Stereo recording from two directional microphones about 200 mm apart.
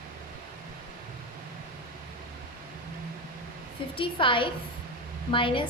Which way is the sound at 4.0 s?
25° left (ahead or behind).